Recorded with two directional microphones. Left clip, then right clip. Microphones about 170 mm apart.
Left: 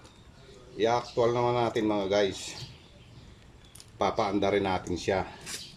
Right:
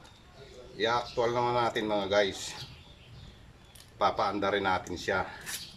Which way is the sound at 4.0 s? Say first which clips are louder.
Left 1 dB; 20° left (ahead or behind).